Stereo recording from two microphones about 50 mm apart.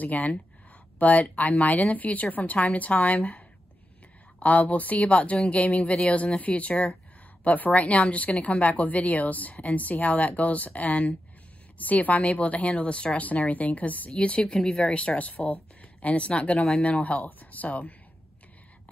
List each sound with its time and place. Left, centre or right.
0.0 s a woman's voice: left
14.1 s a woman's voice: left